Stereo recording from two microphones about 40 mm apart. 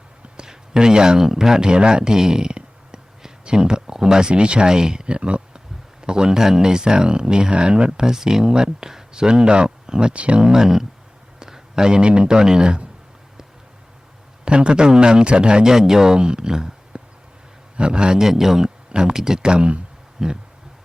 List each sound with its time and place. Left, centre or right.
0.3 s speech: centre
10.4 s speech: centre
14.4 s speech: right
18.2 s speech: centre
18.9 s speech: right
20.1 s a sound: centre